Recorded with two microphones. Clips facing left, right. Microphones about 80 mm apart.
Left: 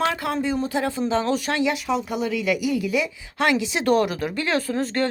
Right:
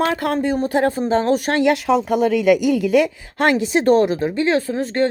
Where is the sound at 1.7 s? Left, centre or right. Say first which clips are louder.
Right 7 dB; right.